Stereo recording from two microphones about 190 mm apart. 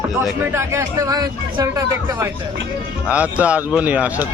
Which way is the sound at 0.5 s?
15° right (ahead or behind).